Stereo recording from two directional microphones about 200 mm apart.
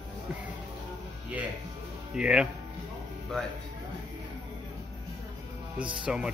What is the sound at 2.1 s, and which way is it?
Speech, 5° right (ahead or behind).